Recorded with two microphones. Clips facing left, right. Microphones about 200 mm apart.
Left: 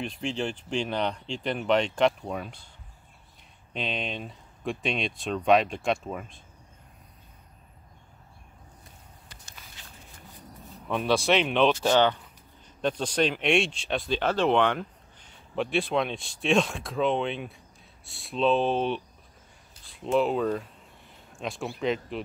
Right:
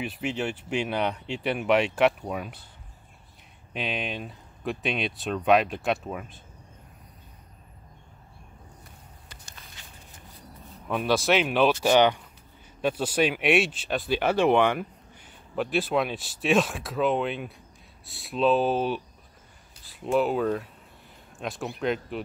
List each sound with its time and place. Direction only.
0.0 s speech: 5° right (ahead or behind)
3.7 s speech: 5° right (ahead or behind)
10.9 s speech: centre (ahead or behind)